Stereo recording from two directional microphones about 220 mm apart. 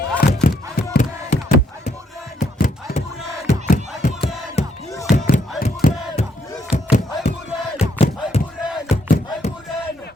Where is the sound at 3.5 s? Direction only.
35° left (ahead or behind).